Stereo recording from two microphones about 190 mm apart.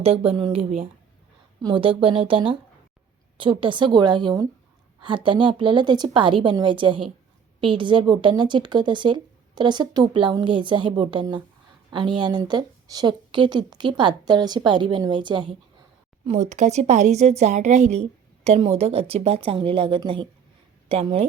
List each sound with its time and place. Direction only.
0.0 s speech: 30° right (ahead or behind)
16.2 s speech: 35° right (ahead or behind)